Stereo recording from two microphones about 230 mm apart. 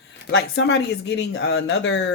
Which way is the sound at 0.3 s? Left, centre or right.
Left.